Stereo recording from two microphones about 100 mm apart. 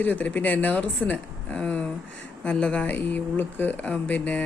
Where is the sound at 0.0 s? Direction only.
15° left (ahead or behind).